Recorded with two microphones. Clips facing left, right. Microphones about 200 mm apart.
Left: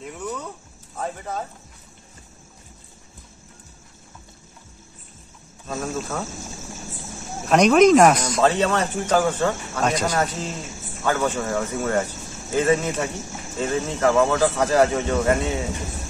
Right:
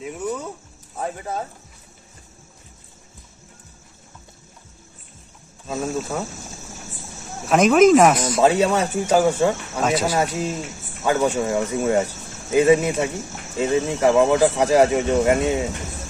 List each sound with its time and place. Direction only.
0.0 s a sound: 10° right (ahead or behind)
0.9 s speech: 10° right (ahead or behind)
5.7 s speech: 10° right (ahead or behind)
7.4 s speech: 5° right (ahead or behind)